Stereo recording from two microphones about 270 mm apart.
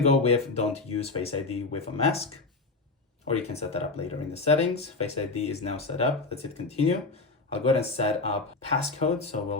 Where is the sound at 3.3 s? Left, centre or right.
Left.